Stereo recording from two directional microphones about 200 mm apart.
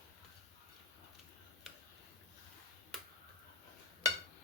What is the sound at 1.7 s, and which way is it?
Tick-tock, centre (ahead or behind).